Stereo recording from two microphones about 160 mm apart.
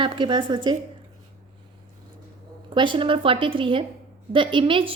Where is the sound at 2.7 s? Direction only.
30° right (ahead or behind).